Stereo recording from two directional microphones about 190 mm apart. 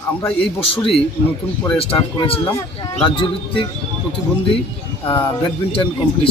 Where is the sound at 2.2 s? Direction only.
30° left (ahead or behind).